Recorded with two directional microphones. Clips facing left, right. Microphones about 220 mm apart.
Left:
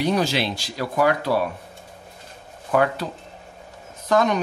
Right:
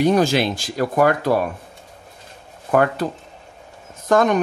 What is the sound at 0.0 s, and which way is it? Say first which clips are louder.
Speech: right 5 dB; 50° right (ahead or behind).